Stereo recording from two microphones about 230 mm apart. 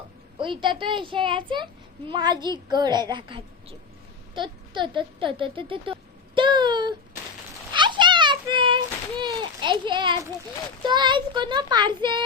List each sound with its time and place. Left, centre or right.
0.3 s a woman's voice: right
4.4 s a sound: right
10.8 s a woman's voice: centre